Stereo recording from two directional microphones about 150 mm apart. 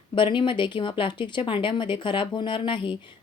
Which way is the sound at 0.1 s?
35° left (ahead or behind).